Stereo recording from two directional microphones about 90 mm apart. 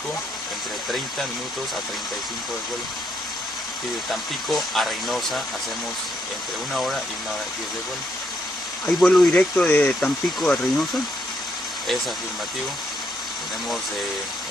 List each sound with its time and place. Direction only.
4.5 s speech: centre (ahead or behind)
8.8 s speech: 10° left (ahead or behind)
9.9 s speech: 5° left (ahead or behind)